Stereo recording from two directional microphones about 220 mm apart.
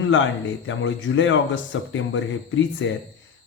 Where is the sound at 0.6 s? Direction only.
60° left (ahead or behind).